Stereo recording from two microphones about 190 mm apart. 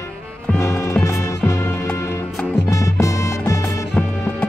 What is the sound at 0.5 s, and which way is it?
Music, 15° left (ahead or behind).